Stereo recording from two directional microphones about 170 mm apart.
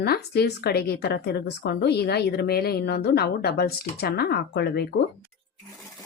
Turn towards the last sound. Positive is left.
turn(degrees=75)  # may be behind; listen again after turning